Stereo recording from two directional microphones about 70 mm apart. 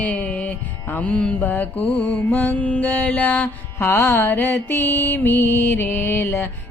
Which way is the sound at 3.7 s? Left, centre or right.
Left.